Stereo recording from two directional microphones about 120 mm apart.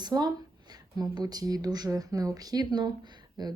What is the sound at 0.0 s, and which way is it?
Speech, 30° right (ahead or behind).